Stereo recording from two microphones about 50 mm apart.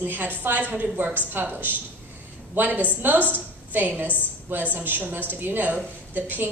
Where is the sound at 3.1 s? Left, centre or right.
Left.